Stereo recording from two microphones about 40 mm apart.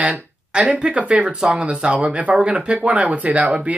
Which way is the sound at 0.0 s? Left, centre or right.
Right.